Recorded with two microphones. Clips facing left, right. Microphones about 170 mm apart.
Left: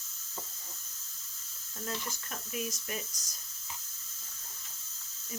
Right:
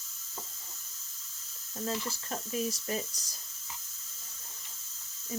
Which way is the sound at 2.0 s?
30° right (ahead or behind).